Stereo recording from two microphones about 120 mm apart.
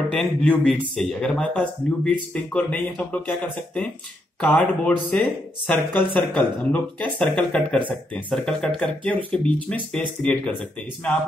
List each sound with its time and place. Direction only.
0.1 s speech: 10° left (ahead or behind)
4.4 s speech: 10° left (ahead or behind)